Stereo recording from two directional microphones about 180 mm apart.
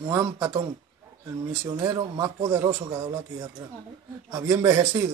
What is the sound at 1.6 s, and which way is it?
A man's voice, 25° right (ahead or behind).